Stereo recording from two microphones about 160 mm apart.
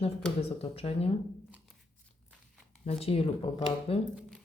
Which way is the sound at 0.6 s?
35° left (ahead or behind).